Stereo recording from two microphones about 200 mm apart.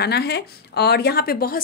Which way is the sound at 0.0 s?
55° left (ahead or behind).